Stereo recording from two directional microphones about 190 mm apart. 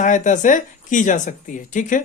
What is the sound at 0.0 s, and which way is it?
Speech, 40° left (ahead or behind).